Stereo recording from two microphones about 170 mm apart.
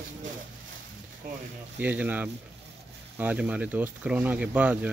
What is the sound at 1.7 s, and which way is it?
Speech, 10° right (ahead or behind).